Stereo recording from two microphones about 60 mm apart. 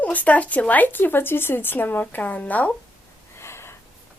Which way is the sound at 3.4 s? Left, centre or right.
Left.